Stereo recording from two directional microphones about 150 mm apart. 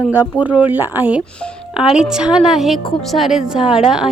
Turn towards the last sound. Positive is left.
turn(degrees=-5)  # may be behind; listen again after turning